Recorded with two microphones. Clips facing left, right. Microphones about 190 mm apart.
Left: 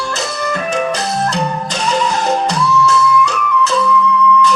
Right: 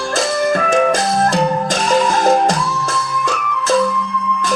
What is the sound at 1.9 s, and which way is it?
Music, 50° right (ahead or behind).